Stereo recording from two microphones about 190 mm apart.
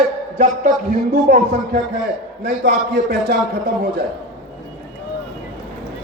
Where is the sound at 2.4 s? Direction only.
65° right (ahead or behind).